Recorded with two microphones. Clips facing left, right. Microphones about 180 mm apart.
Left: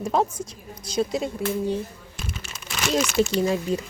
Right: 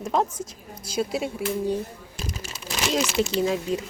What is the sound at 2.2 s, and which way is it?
Crumpling, 35° right (ahead or behind).